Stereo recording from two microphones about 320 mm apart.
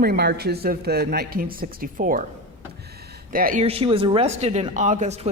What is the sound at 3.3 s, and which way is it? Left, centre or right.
Speech, right.